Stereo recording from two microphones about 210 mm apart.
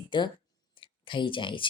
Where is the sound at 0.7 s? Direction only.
25° left (ahead or behind).